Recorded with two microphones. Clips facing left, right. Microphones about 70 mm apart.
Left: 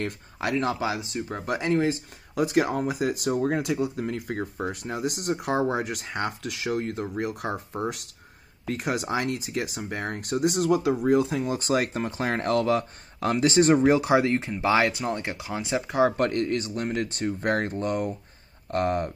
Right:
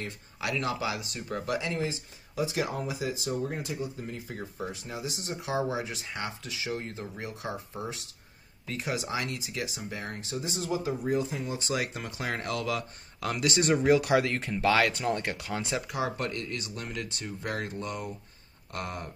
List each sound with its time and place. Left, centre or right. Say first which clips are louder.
0.4 s speech: left 5 dB; left
1.6 s speech: left 8 dB; left
10.2 s speech: left 14 dB; left; by 15.8 s centre
15.9 s speech: left 9 dB; left